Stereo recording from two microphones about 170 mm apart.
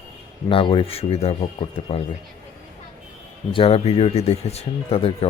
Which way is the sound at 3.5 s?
35° left (ahead or behind).